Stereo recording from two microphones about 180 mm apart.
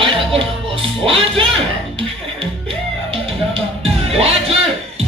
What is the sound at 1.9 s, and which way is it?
Music, 30° right (ahead or behind).